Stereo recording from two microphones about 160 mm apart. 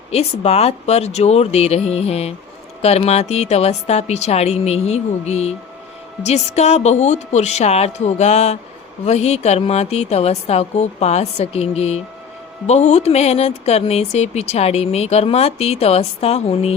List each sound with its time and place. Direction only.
0.1 s a woman's voice: 40° left (ahead or behind)